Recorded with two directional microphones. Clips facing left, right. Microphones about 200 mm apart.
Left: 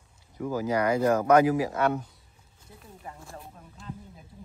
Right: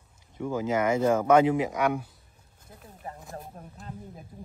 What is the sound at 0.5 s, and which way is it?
Speech, 25° right (ahead or behind).